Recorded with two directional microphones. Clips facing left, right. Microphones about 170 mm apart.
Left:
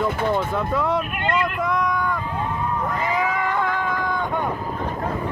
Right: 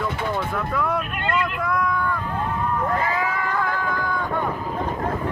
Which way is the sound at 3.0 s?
20° left (ahead or behind).